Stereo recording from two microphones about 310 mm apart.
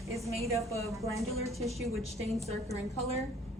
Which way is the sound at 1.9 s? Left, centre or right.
Centre.